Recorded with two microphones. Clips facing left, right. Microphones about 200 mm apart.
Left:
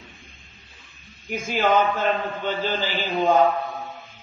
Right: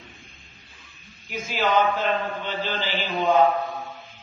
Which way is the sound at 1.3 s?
50° left (ahead or behind).